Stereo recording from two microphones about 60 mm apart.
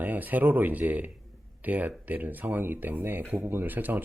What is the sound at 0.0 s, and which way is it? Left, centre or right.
Speech, right.